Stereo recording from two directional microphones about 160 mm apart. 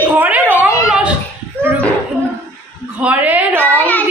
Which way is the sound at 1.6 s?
5° left (ahead or behind).